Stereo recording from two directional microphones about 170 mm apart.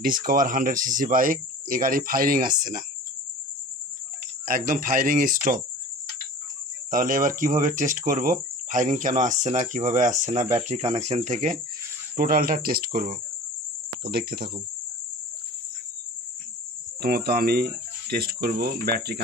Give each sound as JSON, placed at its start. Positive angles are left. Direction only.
{"t": 0.2, "sound": "speech", "side_deg": -55}
{"t": 4.5, "sound": "speech", "side_deg": -55}
{"t": 6.9, "sound": "speech", "side_deg": -55}
{"t": 12.2, "sound": "speech", "side_deg": -55}
{"t": 14.1, "sound": "speech", "side_deg": -70}
{"t": 17.0, "sound": "speech", "side_deg": -65}